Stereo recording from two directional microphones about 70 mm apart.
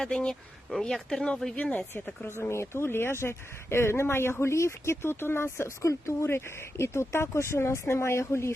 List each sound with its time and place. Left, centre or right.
0.0 s speech: centre
2.2 s speech: left